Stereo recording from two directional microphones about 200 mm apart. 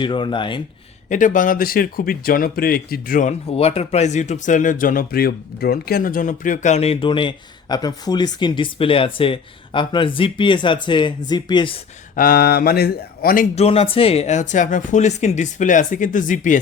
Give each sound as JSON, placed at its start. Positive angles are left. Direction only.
{"t": 0.0, "sound": "speech", "side_deg": 25}
{"t": 1.1, "sound": "speech", "side_deg": 40}
{"t": 12.1, "sound": "speech", "side_deg": 45}